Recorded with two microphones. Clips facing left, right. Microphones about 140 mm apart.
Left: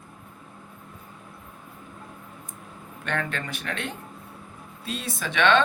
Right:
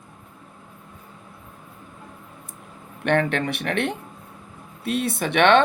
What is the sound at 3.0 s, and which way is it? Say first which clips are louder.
Speech: right 9 dB; 65° right (ahead or behind).